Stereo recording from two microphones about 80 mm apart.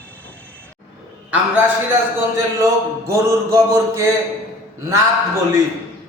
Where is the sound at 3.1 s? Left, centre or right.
Right.